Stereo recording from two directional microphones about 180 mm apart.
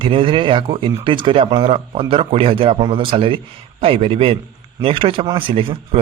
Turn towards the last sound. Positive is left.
turn(degrees=-30)  # may be behind; listen again after turning